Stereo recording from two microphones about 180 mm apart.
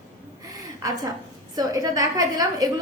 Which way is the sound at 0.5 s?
20° right (ahead or behind).